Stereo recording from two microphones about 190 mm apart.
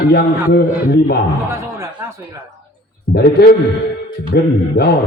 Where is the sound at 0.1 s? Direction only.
55° left (ahead or behind).